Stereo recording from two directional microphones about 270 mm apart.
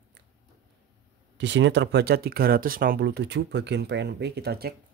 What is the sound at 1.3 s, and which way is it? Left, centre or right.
Speech, right.